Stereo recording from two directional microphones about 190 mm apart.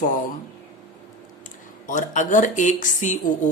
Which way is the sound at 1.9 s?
40° left (ahead or behind).